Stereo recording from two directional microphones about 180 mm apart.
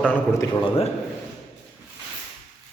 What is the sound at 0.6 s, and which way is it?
Speech, 30° left (ahead or behind).